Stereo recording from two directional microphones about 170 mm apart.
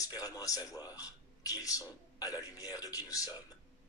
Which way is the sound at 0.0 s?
20° left (ahead or behind).